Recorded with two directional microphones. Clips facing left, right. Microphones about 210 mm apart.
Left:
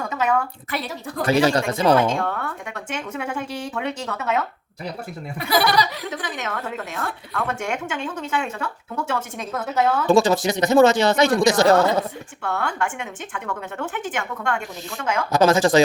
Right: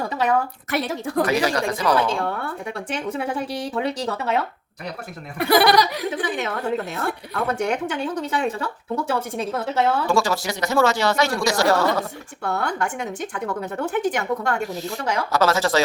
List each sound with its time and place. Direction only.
0.0 s a woman's voice: 35° right (ahead or behind)
0.8 s speech: 50° right (ahead or behind)
1.2 s speech: 30° left (ahead or behind)
2.0 s a woman's voice: 30° right (ahead or behind)
5.4 s speech: 55° right (ahead or behind)
6.1 s a woman's voice: 30° right (ahead or behind)
10.1 s speech: 20° left (ahead or behind)
12.4 s a woman's voice: 40° right (ahead or behind)
15.3 s speech: 15° left (ahead or behind)